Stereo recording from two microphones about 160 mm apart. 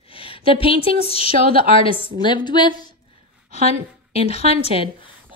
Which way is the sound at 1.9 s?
30° right (ahead or behind).